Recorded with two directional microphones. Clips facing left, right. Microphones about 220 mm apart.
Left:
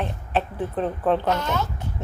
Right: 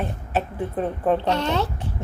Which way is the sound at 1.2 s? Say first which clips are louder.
Right 2 dB; 30° right (ahead or behind).